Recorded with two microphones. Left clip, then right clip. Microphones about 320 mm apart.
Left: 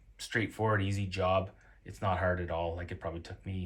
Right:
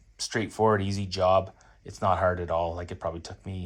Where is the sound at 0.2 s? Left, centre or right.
Centre.